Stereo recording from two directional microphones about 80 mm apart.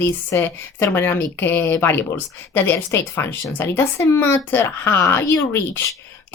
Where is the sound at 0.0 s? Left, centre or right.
Left.